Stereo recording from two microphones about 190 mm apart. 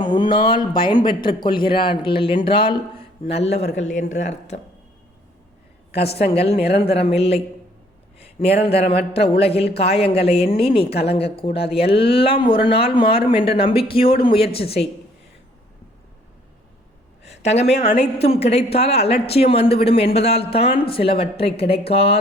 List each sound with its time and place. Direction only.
0.0 s a man's voice: 25° left (ahead or behind)
5.9 s a woman's voice: 60° left (ahead or behind)
6.7 s a woman's voice: 30° left (ahead or behind)
8.6 s a woman's voice: 30° left (ahead or behind)
17.4 s a woman's voice: 35° left (ahead or behind)